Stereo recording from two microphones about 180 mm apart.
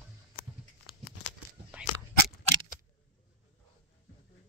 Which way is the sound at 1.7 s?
5° right (ahead or behind).